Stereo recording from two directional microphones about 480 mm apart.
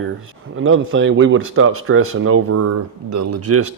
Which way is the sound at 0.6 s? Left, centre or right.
Right.